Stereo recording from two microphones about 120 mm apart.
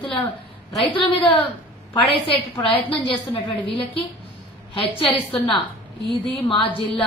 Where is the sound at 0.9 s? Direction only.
50° left (ahead or behind).